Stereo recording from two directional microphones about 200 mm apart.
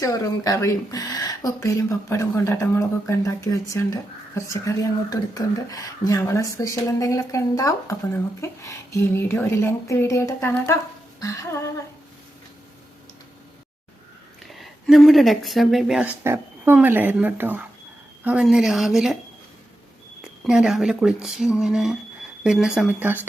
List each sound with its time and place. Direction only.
0.0 s speech: 15° left (ahead or behind)
14.5 s speech: centre (ahead or behind)
20.4 s speech: 5° right (ahead or behind)